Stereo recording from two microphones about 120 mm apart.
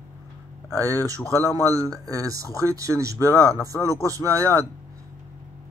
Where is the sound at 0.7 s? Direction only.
25° right (ahead or behind).